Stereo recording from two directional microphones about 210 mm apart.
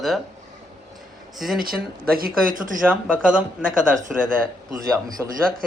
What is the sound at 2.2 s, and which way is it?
Speech, 40° right (ahead or behind).